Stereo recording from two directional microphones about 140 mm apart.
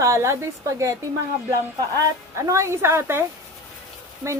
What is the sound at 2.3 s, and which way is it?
Speech, 20° right (ahead or behind).